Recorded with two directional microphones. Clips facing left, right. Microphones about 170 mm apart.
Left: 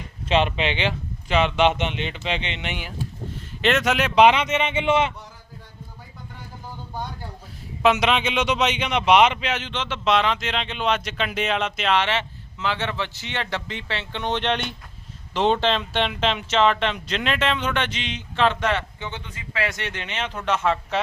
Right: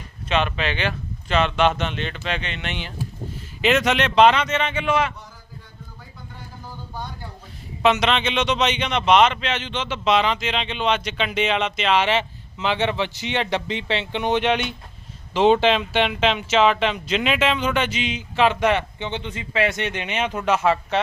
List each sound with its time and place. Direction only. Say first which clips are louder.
0.3 s speech: left 2 dB; 25° left (ahead or behind)
3.6 s speech: right 2 dB; centre (ahead or behind); by 5.1 s 25° left (ahead or behind)
7.8 s speech: even; 5° left (ahead or behind)
12.0 s a man's voice: right 4 dB; 15° right (ahead or behind)